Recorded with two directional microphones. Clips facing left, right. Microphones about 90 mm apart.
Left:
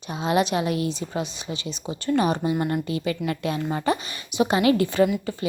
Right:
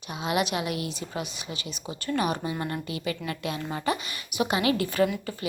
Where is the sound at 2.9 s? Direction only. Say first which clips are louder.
Left 6 dB; 35° left (ahead or behind).